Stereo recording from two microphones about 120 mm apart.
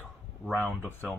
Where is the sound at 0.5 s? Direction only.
15° right (ahead or behind).